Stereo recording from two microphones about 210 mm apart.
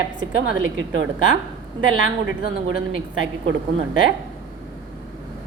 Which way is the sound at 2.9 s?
65° right (ahead or behind).